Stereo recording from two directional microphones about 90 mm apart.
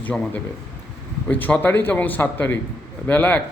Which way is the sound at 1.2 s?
15° left (ahead or behind).